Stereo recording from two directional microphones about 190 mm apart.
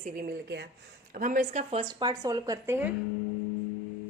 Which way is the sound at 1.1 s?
45° right (ahead or behind).